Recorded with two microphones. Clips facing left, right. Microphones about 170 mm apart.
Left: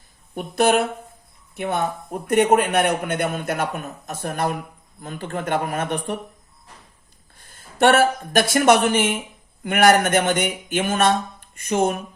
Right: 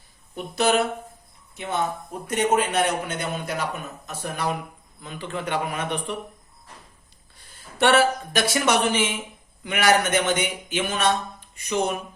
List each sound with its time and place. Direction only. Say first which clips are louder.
0.3 s a man's voice: left 3 dB; 55° left (ahead or behind)
7.3 s speech: left 3 dB; 50° left (ahead or behind)